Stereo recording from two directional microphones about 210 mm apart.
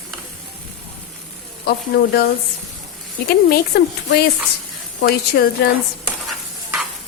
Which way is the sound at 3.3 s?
50° left (ahead or behind).